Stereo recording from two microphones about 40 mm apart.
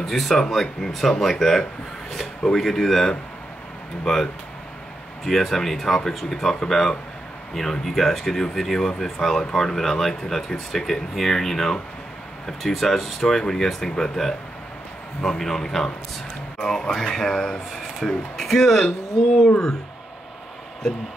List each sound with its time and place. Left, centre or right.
0.0 s speech: centre